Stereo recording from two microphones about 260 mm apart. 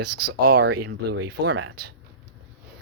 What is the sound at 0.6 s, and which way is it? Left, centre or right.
Speech, right.